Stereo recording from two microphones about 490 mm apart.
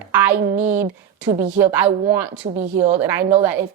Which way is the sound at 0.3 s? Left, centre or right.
Centre.